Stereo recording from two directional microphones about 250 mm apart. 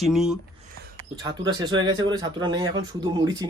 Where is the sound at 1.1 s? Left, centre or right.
Centre.